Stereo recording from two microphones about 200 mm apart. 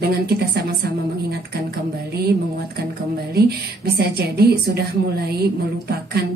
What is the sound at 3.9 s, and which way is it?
Speech, 50° right (ahead or behind).